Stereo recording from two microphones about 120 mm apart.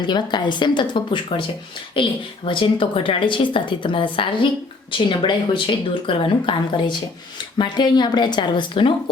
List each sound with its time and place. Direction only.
0.0 s a woman's voice: 40° left (ahead or behind)